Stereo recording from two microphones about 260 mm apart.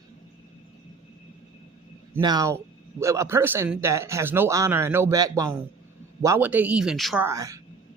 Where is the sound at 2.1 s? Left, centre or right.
Centre.